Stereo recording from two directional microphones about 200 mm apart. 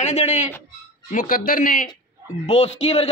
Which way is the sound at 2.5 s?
30° left (ahead or behind).